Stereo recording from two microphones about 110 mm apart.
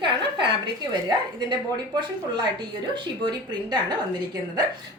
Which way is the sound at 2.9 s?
45° right (ahead or behind).